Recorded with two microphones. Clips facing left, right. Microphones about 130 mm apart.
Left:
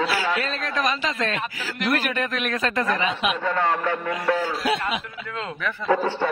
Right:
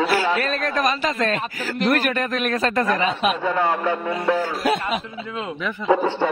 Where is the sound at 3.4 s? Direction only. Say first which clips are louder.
Right 2 dB; 15° right (ahead or behind).